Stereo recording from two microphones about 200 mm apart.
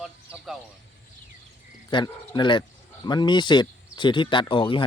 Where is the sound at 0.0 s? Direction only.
Centre (ahead or behind).